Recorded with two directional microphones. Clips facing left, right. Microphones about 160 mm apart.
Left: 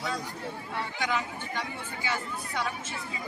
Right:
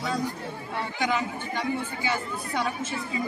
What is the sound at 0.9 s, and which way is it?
Speech, 15° right (ahead or behind).